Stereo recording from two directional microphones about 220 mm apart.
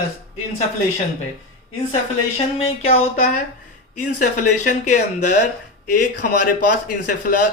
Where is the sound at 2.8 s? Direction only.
30° left (ahead or behind).